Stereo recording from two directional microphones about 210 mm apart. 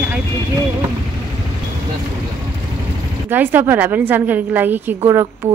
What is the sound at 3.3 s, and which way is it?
A woman's voice, 10° right (ahead or behind).